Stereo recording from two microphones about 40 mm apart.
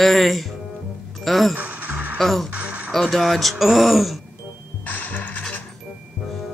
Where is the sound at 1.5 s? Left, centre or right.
Right.